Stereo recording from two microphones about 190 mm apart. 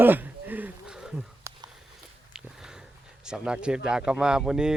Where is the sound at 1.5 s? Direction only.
15° right (ahead or behind).